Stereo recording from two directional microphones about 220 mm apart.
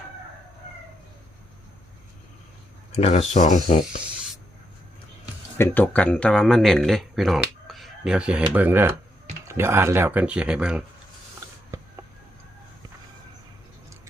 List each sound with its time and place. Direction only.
2.9 s speech: 30° left (ahead or behind)
5.5 s speech: 10° left (ahead or behind)